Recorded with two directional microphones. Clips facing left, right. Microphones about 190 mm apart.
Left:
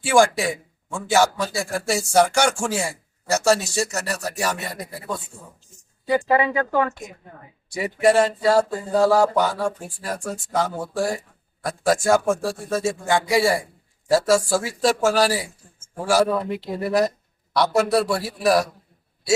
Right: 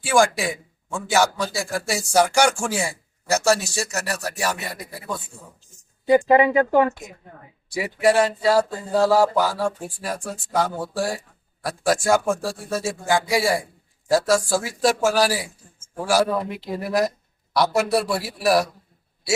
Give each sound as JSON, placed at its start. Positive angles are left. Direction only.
{"t": 0.0, "sound": "speech", "side_deg": 0}
{"t": 6.1, "sound": "speech", "side_deg": -20}
{"t": 7.7, "sound": "a man's voice", "side_deg": -5}